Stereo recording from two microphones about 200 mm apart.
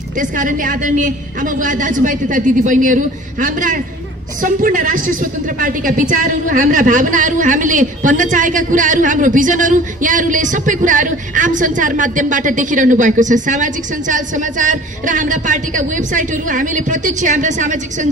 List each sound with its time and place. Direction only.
0.2 s a woman's voice: 40° right (ahead or behind)